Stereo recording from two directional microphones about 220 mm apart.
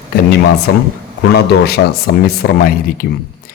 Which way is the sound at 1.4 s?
45° left (ahead or behind).